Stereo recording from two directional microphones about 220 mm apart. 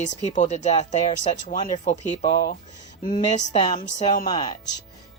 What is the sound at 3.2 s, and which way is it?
Speech, 20° left (ahead or behind).